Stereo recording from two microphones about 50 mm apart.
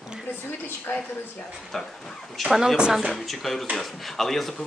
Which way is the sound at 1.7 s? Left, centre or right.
Centre.